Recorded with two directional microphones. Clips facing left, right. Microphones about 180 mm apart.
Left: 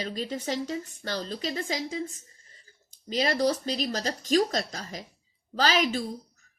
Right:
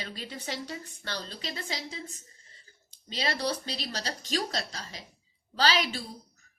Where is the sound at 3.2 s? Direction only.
45° left (ahead or behind).